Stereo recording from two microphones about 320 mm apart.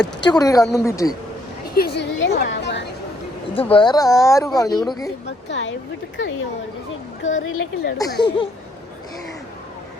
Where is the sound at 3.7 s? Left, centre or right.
Centre.